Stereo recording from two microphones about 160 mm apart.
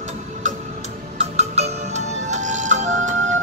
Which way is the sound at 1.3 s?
45° right (ahead or behind).